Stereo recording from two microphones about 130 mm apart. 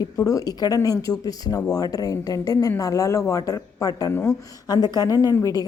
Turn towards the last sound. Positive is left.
turn(degrees=25)  # may be behind; listen again after turning